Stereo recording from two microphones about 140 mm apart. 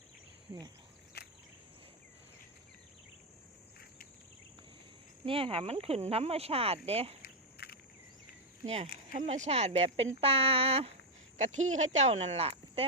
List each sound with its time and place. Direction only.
5.2 s speech: 40° right (ahead or behind)
8.6 s speech: 50° right (ahead or behind)
9.1 s speech: 60° right (ahead or behind)
11.3 s speech: 60° right (ahead or behind)